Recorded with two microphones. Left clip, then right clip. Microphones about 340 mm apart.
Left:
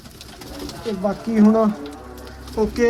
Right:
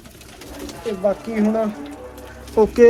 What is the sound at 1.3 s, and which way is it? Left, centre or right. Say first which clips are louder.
Speech: left 3 dB; centre.